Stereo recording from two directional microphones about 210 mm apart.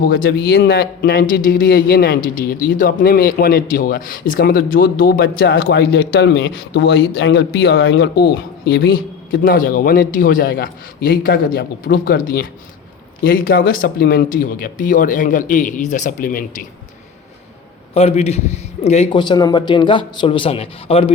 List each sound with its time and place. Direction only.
0.0 s a man's voice: 45° left (ahead or behind)
17.9 s a man's voice: 30° left (ahead or behind)